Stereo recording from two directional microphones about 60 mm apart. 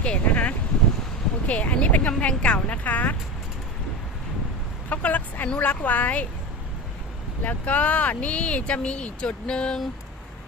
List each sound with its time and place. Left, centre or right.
0.0 s a sound: left
1.5 s speech: left
4.9 s speech: left
7.4 s speech: left